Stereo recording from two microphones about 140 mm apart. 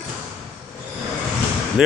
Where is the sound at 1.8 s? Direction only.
5° right (ahead or behind).